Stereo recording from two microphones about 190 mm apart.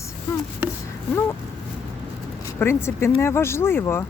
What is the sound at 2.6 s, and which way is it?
A woman's voice, 15° left (ahead or behind).